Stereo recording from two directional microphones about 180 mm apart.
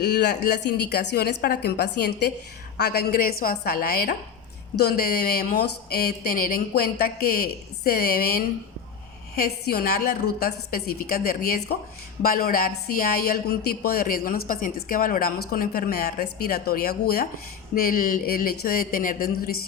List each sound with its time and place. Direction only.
0.0 s speech: 65° left (ahead or behind)